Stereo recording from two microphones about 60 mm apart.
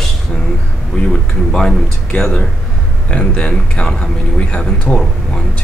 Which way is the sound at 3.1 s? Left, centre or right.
Centre.